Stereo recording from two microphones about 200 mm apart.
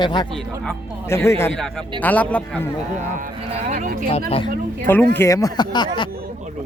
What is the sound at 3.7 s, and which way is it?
Speech, 40° right (ahead or behind).